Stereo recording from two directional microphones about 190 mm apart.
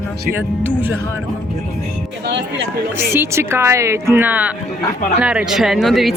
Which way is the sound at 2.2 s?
70° right (ahead or behind).